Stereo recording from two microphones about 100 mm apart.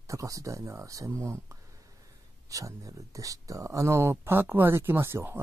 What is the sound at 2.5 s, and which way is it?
Speech, 35° right (ahead or behind).